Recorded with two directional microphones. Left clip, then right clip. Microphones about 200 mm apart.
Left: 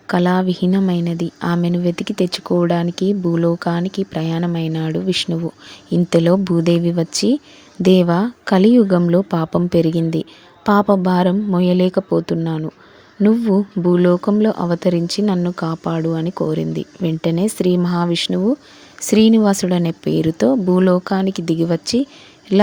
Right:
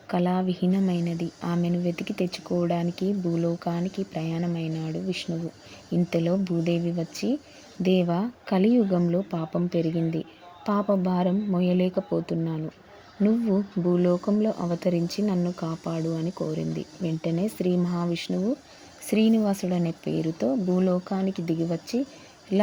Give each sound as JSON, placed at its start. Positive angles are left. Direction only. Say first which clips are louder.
{"t": 0.1, "sound": "speech", "louder": "left 9 dB", "side_deg": 25}